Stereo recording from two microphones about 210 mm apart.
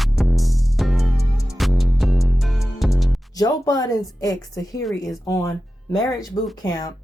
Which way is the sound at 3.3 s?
15° left (ahead or behind).